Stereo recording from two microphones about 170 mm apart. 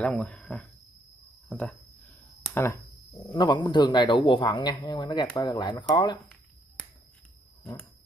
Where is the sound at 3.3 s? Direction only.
25° left (ahead or behind).